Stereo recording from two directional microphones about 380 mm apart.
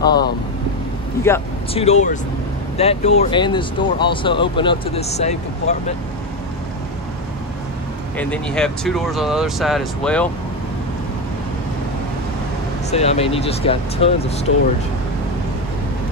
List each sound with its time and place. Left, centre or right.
0.0 s speech: centre
8.2 s speech: centre
12.9 s speech: centre